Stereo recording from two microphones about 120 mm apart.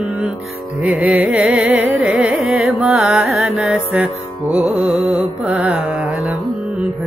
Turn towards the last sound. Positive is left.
turn(degrees=-10)  # may be behind; listen again after turning